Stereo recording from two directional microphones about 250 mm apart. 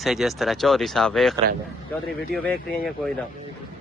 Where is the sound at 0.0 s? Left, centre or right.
Centre.